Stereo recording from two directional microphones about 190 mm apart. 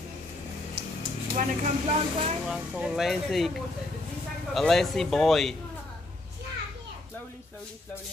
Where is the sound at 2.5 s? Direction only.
5° right (ahead or behind).